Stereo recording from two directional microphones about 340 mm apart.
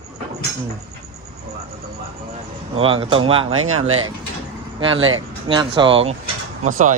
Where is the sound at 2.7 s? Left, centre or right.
Centre.